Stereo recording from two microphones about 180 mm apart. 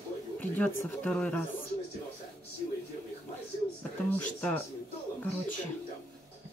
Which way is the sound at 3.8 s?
10° left (ahead or behind).